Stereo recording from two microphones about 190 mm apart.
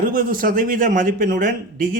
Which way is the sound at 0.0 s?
45° right (ahead or behind).